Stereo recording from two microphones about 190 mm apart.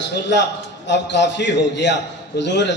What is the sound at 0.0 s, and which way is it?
A man's voice, 65° left (ahead or behind).